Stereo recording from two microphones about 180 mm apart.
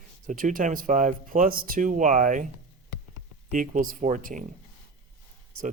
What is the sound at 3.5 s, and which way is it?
Speech, 45° right (ahead or behind).